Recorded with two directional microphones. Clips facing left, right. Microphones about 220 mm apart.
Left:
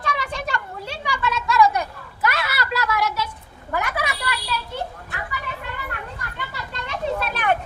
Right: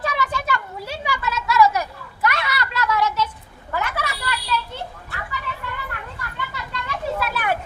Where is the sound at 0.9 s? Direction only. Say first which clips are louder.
Even; 5° right (ahead or behind).